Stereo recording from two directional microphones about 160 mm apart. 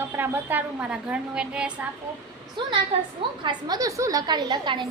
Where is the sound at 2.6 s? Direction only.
30° right (ahead or behind).